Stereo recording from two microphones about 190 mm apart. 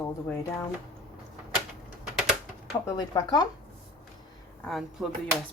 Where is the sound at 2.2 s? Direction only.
5° right (ahead or behind).